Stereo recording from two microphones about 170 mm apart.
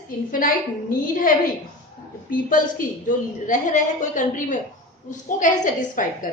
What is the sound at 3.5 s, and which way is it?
A woman's voice, 50° left (ahead or behind).